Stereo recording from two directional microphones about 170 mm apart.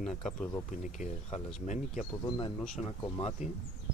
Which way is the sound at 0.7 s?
45° left (ahead or behind).